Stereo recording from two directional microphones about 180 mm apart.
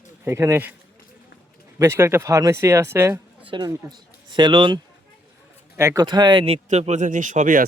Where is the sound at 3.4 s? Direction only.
25° right (ahead or behind).